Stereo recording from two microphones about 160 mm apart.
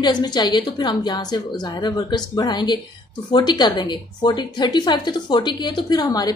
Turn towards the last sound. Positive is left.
turn(degrees=25)  # may be behind; listen again after turning